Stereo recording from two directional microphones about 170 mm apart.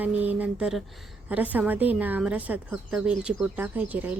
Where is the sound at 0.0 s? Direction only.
10° right (ahead or behind).